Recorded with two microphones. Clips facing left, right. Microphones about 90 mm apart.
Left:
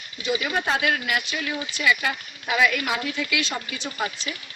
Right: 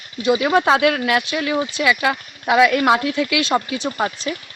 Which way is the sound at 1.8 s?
90° right.